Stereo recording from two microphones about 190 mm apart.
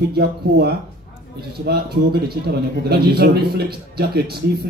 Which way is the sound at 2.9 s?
55° right (ahead or behind).